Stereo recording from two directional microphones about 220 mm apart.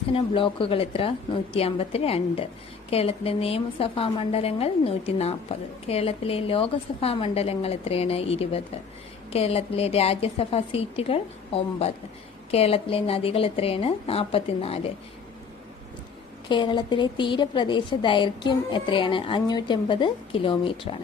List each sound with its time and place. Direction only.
0.1 s a woman's voice: 25° left (ahead or behind)
16.5 s a woman's voice: 20° left (ahead or behind)